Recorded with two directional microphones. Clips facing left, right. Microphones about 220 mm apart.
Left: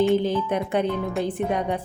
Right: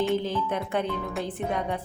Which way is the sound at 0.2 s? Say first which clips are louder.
Left 5 dB; 15° left (ahead or behind).